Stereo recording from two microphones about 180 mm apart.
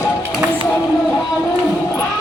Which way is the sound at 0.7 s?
5° left (ahead or behind).